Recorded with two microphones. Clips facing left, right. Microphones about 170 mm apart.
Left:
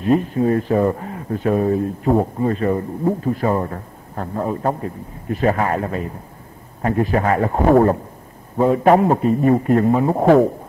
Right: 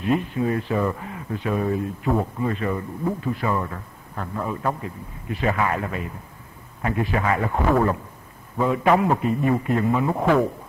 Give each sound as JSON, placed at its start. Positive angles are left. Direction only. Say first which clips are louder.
{"t": 0.0, "sound": "speech", "louder": "left 6 dB", "side_deg": 40}